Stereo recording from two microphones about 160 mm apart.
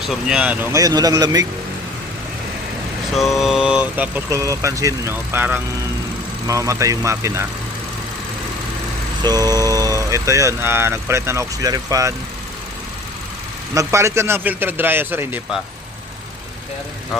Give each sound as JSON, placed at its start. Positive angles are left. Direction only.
{"t": 0.0, "sound": "speech", "side_deg": -5}
{"t": 0.8, "sound": "speech", "side_deg": -25}
{"t": 3.2, "sound": "speech", "side_deg": 0}
{"t": 9.2, "sound": "speech", "side_deg": -25}
{"t": 13.7, "sound": "speech", "side_deg": -20}